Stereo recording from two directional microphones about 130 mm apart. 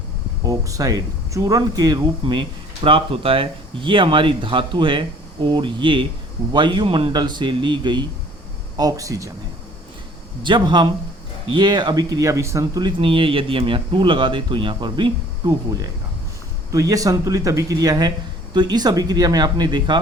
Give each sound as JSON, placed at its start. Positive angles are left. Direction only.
{"t": 0.4, "sound": "speech", "side_deg": -25}
{"t": 10.4, "sound": "speech", "side_deg": -35}
{"t": 13.0, "sound": "speech", "side_deg": -40}